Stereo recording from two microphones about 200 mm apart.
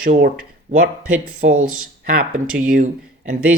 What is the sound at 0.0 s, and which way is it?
Speech, 45° right (ahead or behind).